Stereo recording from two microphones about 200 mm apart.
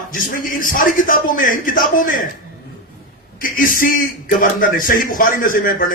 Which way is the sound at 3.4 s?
45° left (ahead or behind).